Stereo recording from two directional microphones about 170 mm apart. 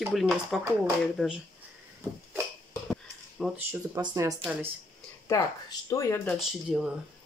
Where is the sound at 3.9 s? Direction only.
20° right (ahead or behind).